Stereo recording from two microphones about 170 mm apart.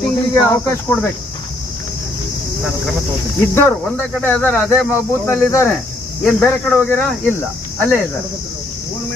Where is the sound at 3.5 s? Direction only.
15° left (ahead or behind).